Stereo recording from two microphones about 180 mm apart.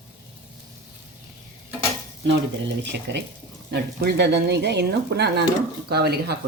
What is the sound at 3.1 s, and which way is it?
Speech, 75° right (ahead or behind).